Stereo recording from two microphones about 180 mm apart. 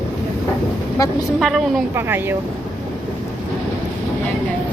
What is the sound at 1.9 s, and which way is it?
Speech, 15° right (ahead or behind).